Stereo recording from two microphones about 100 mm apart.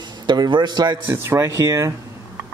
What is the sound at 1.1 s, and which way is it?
Speech, 25° right (ahead or behind).